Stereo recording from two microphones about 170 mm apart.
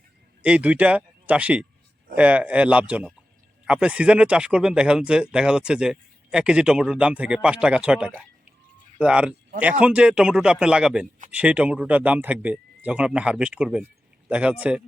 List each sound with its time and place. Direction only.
0.4 s speech: 5° right (ahead or behind)